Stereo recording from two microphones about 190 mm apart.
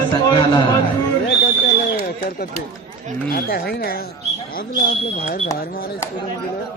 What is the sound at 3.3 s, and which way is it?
Speech, 55° left (ahead or behind).